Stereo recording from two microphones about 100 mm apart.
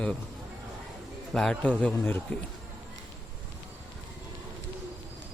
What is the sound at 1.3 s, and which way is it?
Speech, 5° left (ahead or behind).